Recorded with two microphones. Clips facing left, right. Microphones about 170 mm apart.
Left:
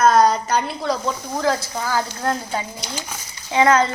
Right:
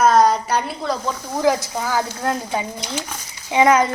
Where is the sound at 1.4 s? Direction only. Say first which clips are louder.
Right 4 dB; 15° right (ahead or behind).